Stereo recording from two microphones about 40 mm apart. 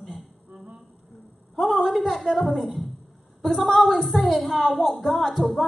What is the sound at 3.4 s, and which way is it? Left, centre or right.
A woman's voice, centre.